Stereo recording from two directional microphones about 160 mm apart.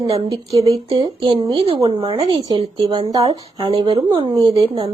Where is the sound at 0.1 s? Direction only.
40° right (ahead or behind); by 3.7 s 20° right (ahead or behind).